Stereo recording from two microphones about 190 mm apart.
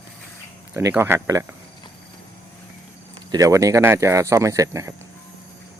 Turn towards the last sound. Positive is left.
turn(degrees=-15)  # may be behind; listen again after turning